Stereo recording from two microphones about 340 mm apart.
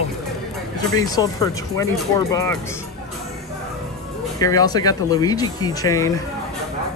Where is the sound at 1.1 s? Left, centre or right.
Centre.